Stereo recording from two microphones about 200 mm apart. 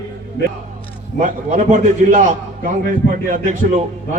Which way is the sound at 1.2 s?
40° right (ahead or behind).